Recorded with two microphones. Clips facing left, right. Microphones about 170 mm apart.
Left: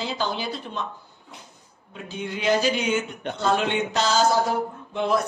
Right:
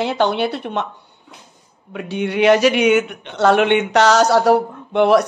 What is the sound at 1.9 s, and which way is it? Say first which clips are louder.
Mantra: right 12 dB; 70° right (ahead or behind).